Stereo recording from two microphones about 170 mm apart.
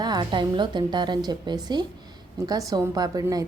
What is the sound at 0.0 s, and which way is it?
A woman's voice, 25° right (ahead or behind).